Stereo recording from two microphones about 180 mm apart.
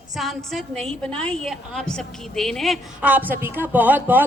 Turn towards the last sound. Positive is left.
turn(degrees=-10)  # may be behind; listen again after turning